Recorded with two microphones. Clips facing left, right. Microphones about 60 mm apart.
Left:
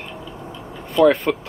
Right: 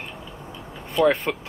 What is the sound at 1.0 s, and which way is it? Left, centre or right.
Speech, centre.